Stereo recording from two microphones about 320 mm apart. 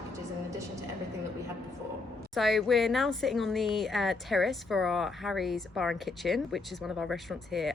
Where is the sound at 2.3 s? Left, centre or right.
Centre.